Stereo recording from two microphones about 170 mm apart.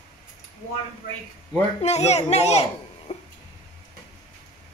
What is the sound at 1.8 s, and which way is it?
A woman's voice, 40° left (ahead or behind).